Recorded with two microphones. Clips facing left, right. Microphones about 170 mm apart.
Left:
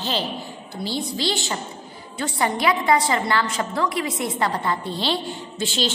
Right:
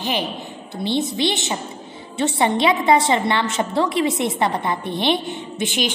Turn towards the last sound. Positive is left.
turn(degrees=-20)  # may be behind; listen again after turning